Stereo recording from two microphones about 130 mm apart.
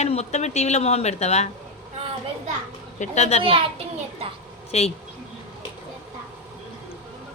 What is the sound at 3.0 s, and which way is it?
Speech, 55° left (ahead or behind).